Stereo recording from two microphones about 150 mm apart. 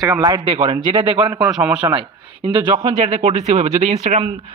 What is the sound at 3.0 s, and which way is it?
Speech, 45° right (ahead or behind).